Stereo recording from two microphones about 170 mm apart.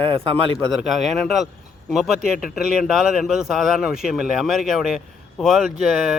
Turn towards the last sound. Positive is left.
turn(degrees=0)  # may be behind; listen again after turning